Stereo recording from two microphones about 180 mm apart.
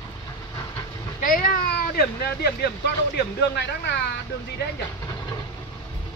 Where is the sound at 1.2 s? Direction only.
50° left (ahead or behind).